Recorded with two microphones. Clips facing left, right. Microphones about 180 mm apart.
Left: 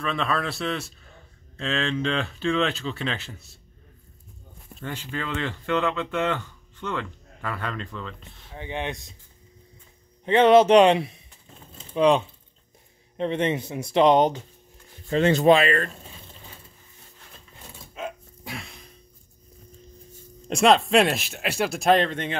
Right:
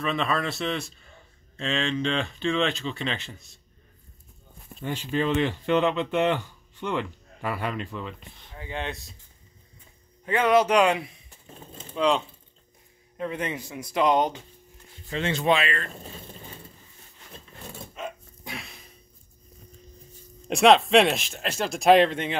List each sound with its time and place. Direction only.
0.0 s speech: centre (ahead or behind)
4.7 s speech: 15° right (ahead or behind)
8.5 s speech: 20° left (ahead or behind)
10.2 s speech: 25° left (ahead or behind)
13.2 s speech: 25° left (ahead or behind)
15.0 s speech: 40° left (ahead or behind)
17.9 s dog: 5° left (ahead or behind)
20.4 s speech: centre (ahead or behind)